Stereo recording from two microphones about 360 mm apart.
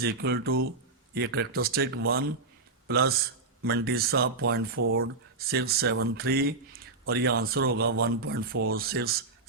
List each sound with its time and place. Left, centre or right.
0.0 s speech: right